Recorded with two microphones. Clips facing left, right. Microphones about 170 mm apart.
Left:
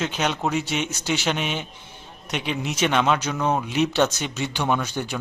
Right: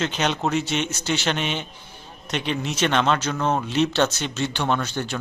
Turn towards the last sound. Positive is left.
turn(degrees=10)  # may be behind; listen again after turning